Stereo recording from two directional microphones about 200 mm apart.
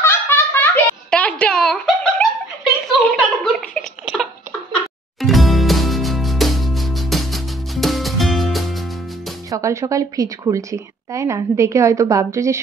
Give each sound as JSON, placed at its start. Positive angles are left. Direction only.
{"t": 0.0, "sound": "a sound", "side_deg": 10}
{"t": 5.2, "sound": "music", "side_deg": 0}
{"t": 9.5, "sound": "a woman's voice", "side_deg": -15}